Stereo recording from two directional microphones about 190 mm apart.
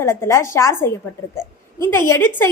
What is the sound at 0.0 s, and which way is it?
A woman's voice, 15° left (ahead or behind).